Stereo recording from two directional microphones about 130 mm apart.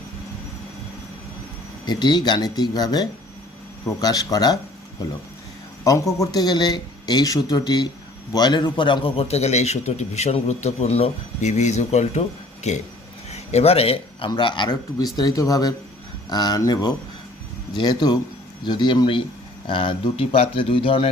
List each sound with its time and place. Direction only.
1.9 s speech: 35° left (ahead or behind)
6.1 s a man's voice: 30° left (ahead or behind); by 14.3 s 50° left (ahead or behind)
14.3 s speech: 35° left (ahead or behind)